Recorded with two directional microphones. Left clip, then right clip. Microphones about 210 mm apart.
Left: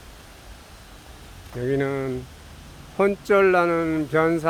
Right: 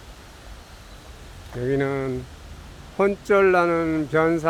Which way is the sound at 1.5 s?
5° left (ahead or behind).